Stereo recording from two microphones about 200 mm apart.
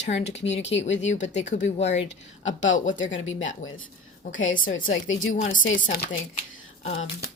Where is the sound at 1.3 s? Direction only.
35° left (ahead or behind).